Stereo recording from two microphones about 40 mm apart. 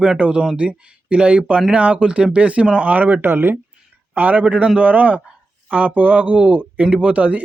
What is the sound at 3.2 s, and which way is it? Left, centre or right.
Speech, right.